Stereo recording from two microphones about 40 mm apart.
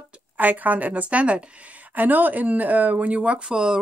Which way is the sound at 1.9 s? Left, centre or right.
Right.